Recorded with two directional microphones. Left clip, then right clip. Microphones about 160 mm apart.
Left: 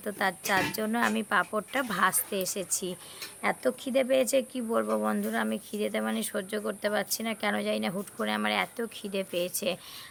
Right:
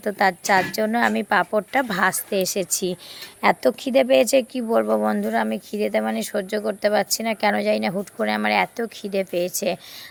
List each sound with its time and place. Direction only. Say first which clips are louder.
0.0 s speech: right 10 dB; 35° right (ahead or behind)